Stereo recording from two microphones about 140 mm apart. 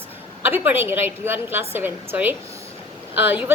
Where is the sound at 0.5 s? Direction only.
15° right (ahead or behind).